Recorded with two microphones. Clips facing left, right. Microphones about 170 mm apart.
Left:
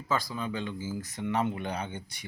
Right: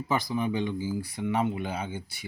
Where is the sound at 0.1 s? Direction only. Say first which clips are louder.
Right 3 dB; 20° right (ahead or behind).